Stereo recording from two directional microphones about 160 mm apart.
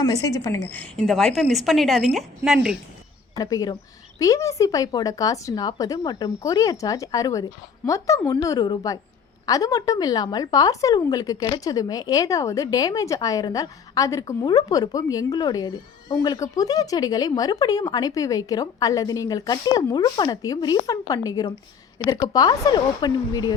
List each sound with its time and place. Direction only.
0.0 s a woman's voice: 20° left (ahead or behind); by 2.7 s 5° right (ahead or behind)
3.3 s a woman's voice: 25° left (ahead or behind)